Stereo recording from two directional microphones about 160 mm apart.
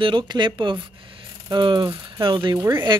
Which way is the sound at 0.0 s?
30° right (ahead or behind).